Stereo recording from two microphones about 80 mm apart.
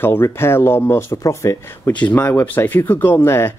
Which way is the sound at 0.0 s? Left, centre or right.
Left.